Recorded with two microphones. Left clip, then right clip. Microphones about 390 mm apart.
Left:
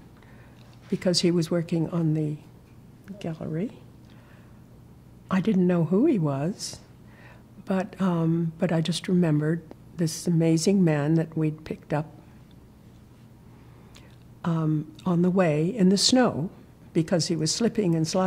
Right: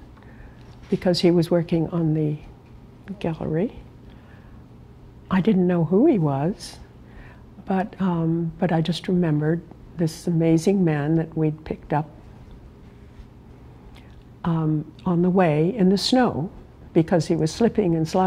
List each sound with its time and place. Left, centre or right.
0.9 s speech: centre
5.3 s a woman's voice: centre
14.4 s a woman's voice: centre